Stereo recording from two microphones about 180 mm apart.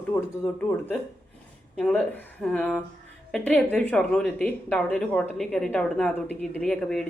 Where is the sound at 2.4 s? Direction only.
5° left (ahead or behind).